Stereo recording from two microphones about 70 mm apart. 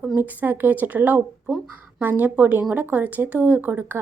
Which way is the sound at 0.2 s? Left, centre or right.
Right.